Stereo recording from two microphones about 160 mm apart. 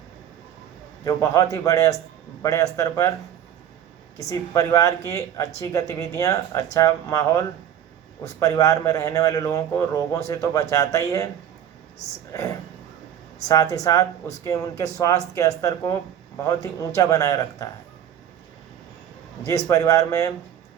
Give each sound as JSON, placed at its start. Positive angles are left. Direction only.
{"t": 1.0, "sound": "a man's voice", "side_deg": 20}
{"t": 4.2, "sound": "a man's voice", "side_deg": 20}
{"t": 13.5, "sound": "a man's voice", "side_deg": 20}
{"t": 19.5, "sound": "a man's voice", "side_deg": 20}